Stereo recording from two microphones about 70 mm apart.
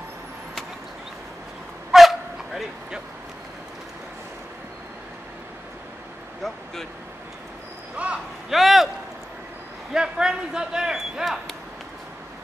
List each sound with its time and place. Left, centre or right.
1.9 s dog: centre
6.4 s speech: centre
7.9 s a sound: centre
8.5 s speech: centre
9.9 s speech: centre